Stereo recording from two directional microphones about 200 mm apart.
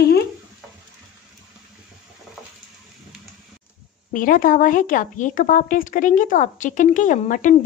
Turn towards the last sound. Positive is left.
turn(degrees=40)  # may be behind; listen again after turning